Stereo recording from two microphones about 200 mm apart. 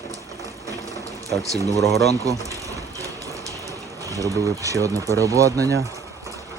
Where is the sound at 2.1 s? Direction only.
15° right (ahead or behind).